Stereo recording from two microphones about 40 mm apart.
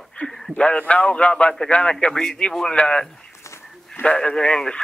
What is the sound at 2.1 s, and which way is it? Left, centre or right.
A man's voice, centre.